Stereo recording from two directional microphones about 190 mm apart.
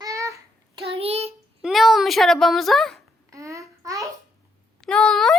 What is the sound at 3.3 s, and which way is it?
Babbling, 15° right (ahead or behind).